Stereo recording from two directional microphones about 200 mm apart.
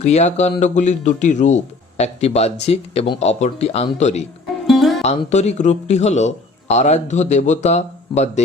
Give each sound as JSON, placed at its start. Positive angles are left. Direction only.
{"t": 0.0, "sound": "speech", "side_deg": 35}
{"t": 4.6, "sound": "music", "side_deg": 0}
{"t": 5.0, "sound": "speech", "side_deg": 35}